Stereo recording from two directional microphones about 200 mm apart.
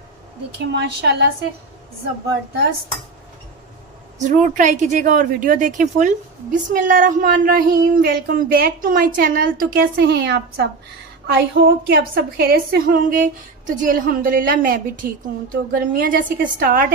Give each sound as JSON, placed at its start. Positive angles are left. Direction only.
{"t": 0.7, "sound": "a woman's voice", "side_deg": -55}
{"t": 4.2, "sound": "speech", "side_deg": -35}